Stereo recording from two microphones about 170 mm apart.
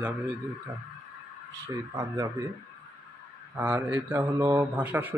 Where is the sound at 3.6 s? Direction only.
10° right (ahead or behind).